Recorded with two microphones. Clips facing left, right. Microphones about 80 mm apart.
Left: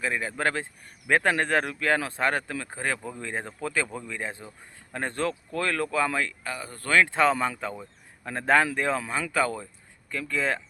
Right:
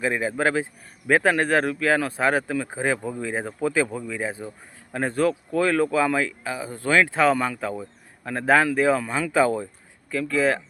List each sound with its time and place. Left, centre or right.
0.0 s a man's voice: centre
9.3 s a man's voice: centre
10.1 s speech: centre